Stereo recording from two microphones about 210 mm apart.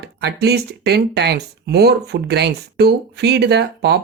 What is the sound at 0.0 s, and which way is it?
Speech, 55° right (ahead or behind).